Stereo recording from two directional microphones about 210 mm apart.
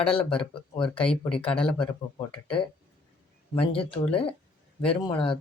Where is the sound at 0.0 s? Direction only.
5° left (ahead or behind).